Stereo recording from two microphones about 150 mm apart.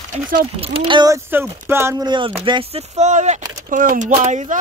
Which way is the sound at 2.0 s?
35° right (ahead or behind).